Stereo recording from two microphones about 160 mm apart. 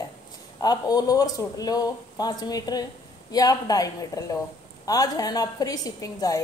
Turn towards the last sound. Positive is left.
turn(degrees=20)  # may be behind; listen again after turning